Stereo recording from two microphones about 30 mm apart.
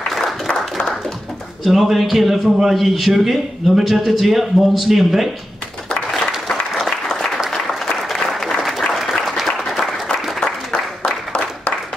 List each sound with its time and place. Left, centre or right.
1.6 s a man's voice: centre
8.1 s applause: centre
8.5 s applause: centre
10.4 s a sound: left